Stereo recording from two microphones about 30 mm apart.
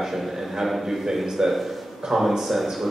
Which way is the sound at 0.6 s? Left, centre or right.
Centre.